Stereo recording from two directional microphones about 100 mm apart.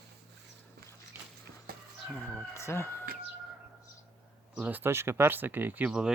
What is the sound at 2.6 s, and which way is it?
Speech, 25° left (ahead or behind).